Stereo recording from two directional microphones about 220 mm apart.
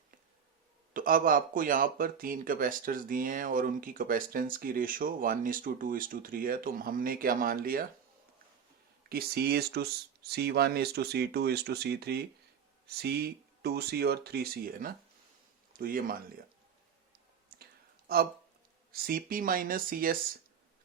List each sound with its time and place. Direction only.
0.9 s speech: 40° right (ahead or behind)
9.0 s speech: 45° right (ahead or behind)
17.5 s clicking: 45° right (ahead or behind)
18.1 s speech: 45° right (ahead or behind)